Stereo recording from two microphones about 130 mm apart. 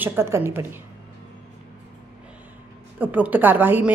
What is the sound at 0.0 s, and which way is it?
Speech, 15° right (ahead or behind).